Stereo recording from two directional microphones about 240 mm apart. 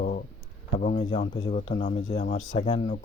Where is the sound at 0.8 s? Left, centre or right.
Left.